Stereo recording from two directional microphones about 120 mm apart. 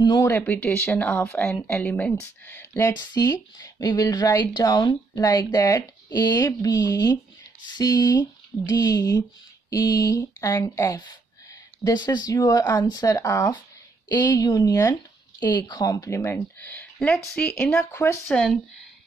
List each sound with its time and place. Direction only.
0.0 s speech: 35° left (ahead or behind)
0.3 s speech: 15° left (ahead or behind)
2.9 s speech: 35° left (ahead or behind); by 18.6 s 5° left (ahead or behind)